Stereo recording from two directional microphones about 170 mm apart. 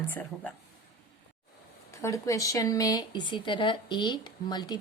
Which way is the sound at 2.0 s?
20° left (ahead or behind).